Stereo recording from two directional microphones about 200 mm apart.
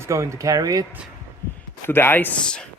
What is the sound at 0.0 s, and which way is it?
Speech, 15° right (ahead or behind).